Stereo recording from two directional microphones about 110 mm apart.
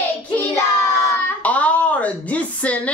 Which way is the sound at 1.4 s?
15° left (ahead or behind).